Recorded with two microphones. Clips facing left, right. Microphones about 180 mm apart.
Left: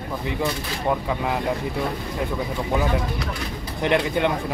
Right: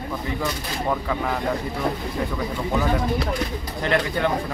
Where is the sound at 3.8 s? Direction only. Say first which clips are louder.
Left 2 dB; 20° left (ahead or behind).